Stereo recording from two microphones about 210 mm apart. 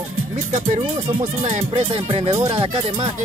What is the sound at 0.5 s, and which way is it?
Music, 30° right (ahead or behind).